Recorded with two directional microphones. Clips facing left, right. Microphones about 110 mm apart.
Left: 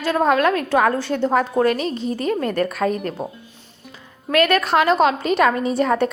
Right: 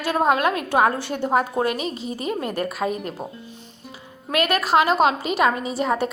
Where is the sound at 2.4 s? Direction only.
10° right (ahead or behind).